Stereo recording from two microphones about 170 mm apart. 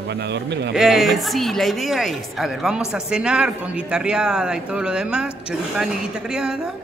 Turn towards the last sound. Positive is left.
turn(degrees=-5)  # may be behind; listen again after turning